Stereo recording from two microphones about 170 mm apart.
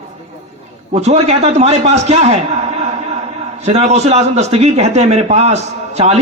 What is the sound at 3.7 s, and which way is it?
A man's voice, 40° right (ahead or behind).